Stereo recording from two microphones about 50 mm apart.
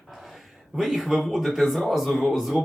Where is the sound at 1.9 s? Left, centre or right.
Centre.